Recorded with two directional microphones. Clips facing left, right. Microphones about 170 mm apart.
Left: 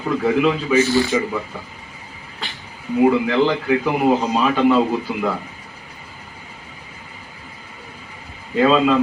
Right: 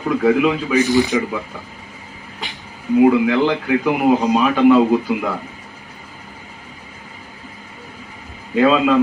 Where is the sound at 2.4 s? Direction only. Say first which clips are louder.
Right 1 dB; 15° right (ahead or behind).